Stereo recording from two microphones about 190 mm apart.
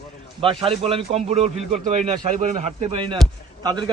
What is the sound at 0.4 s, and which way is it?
Speech, 30° right (ahead or behind).